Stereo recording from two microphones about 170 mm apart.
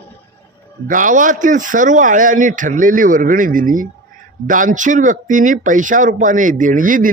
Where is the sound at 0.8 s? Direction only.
50° right (ahead or behind).